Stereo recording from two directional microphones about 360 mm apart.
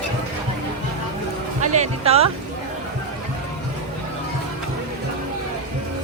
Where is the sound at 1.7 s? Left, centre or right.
Centre.